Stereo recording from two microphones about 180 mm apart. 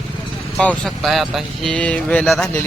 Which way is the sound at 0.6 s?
5° left (ahead or behind).